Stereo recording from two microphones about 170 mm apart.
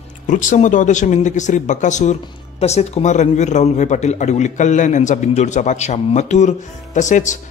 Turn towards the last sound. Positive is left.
turn(degrees=45)  # may be behind; listen again after turning